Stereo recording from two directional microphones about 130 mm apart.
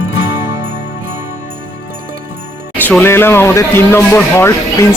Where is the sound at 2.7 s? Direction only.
15° left (ahead or behind).